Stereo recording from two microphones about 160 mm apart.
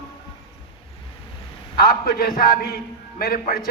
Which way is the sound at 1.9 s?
75° left (ahead or behind).